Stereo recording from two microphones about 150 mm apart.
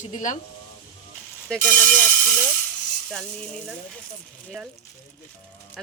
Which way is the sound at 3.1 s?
5° left (ahead or behind).